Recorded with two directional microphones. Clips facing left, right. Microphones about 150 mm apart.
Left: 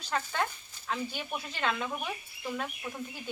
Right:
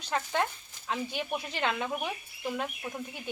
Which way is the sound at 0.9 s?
20° right (ahead or behind).